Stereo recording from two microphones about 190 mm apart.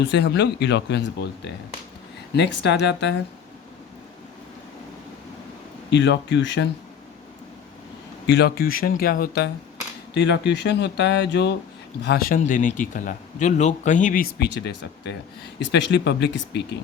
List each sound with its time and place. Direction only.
0.0 s speech: 65° left (ahead or behind)
5.9 s speech: 65° left (ahead or behind)
8.3 s a man's voice: 60° left (ahead or behind)
10.2 s speech: 65° left (ahead or behind)
12.0 s a man's voice: 55° left (ahead or behind)